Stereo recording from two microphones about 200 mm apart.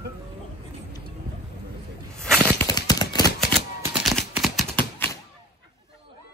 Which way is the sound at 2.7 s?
20° left (ahead or behind).